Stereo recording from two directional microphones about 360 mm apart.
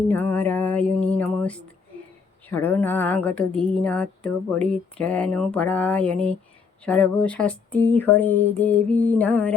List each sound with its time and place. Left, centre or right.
0.1 s speech: centre